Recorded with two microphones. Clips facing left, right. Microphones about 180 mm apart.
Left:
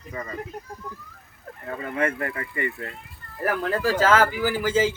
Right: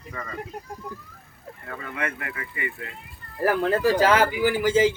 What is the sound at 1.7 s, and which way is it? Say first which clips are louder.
Speech: left 6 dB; 30° left (ahead or behind).